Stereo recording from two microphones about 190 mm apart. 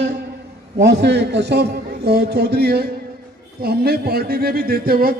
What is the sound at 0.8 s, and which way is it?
A man's voice, 65° right (ahead or behind).